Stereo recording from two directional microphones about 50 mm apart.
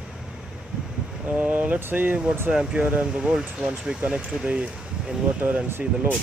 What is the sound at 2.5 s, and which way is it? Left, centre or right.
Speech, right.